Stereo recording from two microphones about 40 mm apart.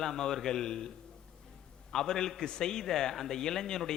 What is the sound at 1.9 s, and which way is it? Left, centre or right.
A man's voice, centre.